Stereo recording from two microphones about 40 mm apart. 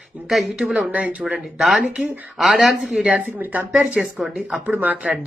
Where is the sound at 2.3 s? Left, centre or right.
Centre.